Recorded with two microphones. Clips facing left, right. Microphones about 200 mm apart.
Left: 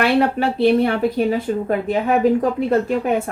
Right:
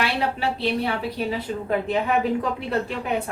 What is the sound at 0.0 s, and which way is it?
Speech, 50° left (ahead or behind).